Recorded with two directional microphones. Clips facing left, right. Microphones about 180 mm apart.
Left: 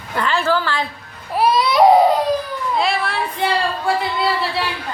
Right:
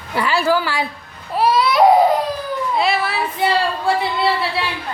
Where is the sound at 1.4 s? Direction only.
20° left (ahead or behind).